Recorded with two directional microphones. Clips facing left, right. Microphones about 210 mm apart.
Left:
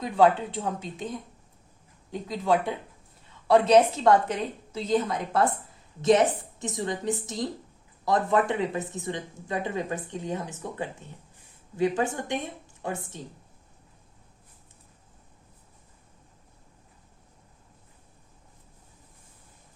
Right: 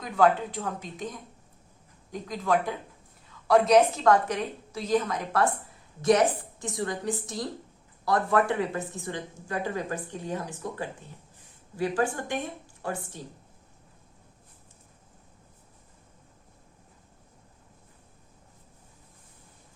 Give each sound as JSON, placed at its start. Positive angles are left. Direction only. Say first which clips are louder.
{"t": 0.0, "sound": "speech", "louder": "left 2 dB", "side_deg": 25}
{"t": 2.2, "sound": "speech", "louder": "left 2 dB", "side_deg": 25}